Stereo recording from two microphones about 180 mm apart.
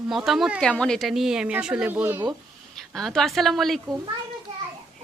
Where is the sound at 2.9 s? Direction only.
Centre (ahead or behind).